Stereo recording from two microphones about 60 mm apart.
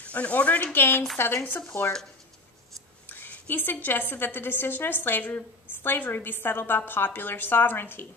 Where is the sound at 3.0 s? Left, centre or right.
Left.